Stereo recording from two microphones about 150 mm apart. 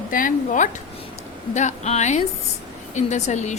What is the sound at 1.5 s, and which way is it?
Speech, 50° left (ahead or behind).